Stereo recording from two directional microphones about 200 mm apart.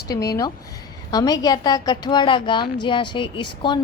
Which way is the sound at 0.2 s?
15° left (ahead or behind).